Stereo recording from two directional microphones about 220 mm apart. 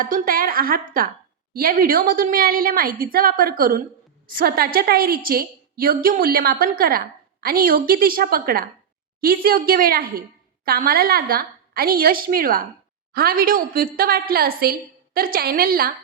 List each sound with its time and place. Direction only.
0.0 s a woman's voice: 40° right (ahead or behind)